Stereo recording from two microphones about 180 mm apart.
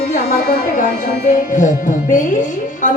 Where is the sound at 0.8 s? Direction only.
50° left (ahead or behind).